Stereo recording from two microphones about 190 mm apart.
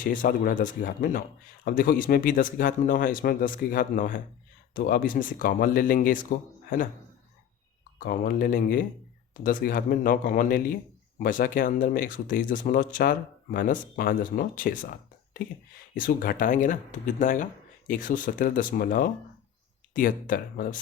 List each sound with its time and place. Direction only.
0.0 s speech: 45° left (ahead or behind)
7.9 s speech: 45° left (ahead or behind)
16.0 s speech: 45° left (ahead or behind)